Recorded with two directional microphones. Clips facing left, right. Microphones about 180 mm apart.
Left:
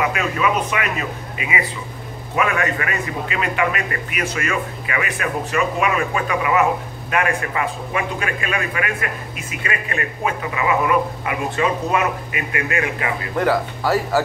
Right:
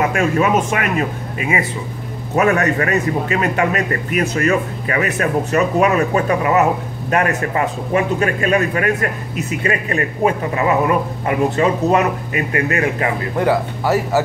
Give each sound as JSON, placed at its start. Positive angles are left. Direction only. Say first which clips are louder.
{"t": 0.0, "sound": "a man's voice", "louder": "right 4 dB", "side_deg": -45}
{"t": 13.4, "sound": "speech", "louder": "right 2 dB", "side_deg": -20}